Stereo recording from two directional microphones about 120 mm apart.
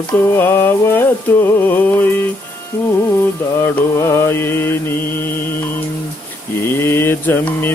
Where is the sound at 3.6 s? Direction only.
20° left (ahead or behind).